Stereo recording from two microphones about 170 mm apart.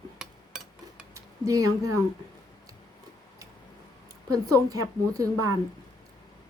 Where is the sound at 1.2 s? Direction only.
20° right (ahead or behind).